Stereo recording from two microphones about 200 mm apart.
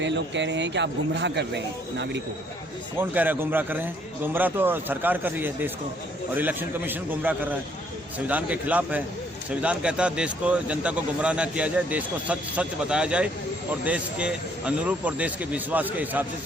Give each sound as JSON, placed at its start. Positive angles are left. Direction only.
{"t": 0.0, "sound": "speech", "side_deg": -60}
{"t": 3.0, "sound": "a man's voice", "side_deg": -10}